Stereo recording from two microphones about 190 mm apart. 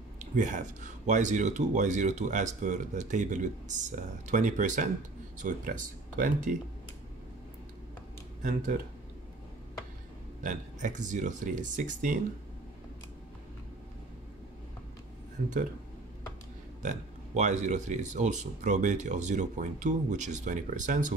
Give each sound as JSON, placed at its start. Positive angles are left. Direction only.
{"t": 0.2, "sound": "speech", "side_deg": -40}
{"t": 8.4, "sound": "speech", "side_deg": -40}
{"t": 10.4, "sound": "speech", "side_deg": -40}
{"t": 16.8, "sound": "speech", "side_deg": -40}